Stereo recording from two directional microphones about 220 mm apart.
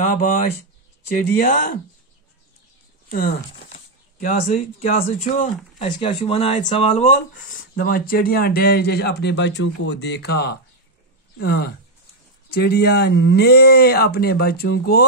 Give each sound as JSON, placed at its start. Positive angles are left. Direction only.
{"t": 0.0, "sound": "speech", "side_deg": 35}
{"t": 1.4, "sound": "speech", "side_deg": 40}
{"t": 3.1, "sound": "speech", "side_deg": 45}
{"t": 3.5, "sound": "a sound", "side_deg": 35}
{"t": 4.6, "sound": "speech", "side_deg": 30}